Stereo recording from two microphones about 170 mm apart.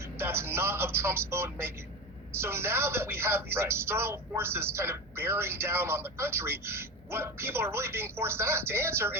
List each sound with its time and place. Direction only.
0.2 s speech: 15° right (ahead or behind)